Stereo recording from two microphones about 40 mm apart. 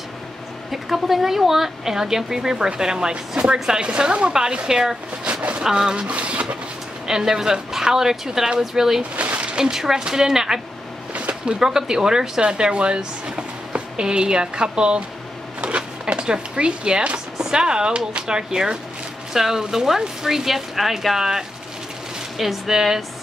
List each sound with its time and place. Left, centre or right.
0.7 s a woman's voice: centre; by 3.5 s right
3.5 s a woman's voice: centre
3.8 s speech: right
5.6 s a woman's voice: centre
6.0 s a sound: right
7.1 s a woman's voice: centre
9.1 s a sound: right
9.6 s a woman's voice: centre
11.1 s a sound: right
11.6 s speech: centre
15.6 s drawer open or close: right
17.4 s a woman's voice: centre